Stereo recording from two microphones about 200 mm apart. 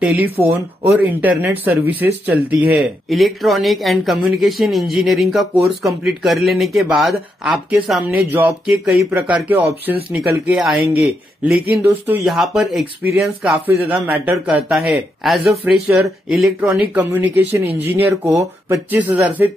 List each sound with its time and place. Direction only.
0.0 s speech: 10° right (ahead or behind)